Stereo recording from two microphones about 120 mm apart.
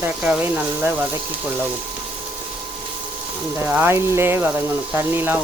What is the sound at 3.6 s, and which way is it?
Speech, 15° right (ahead or behind).